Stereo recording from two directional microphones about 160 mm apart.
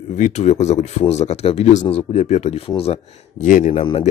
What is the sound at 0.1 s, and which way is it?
Speech, 45° left (ahead or behind).